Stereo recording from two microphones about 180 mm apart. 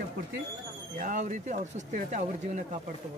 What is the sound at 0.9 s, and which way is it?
Speech, 45° right (ahead or behind).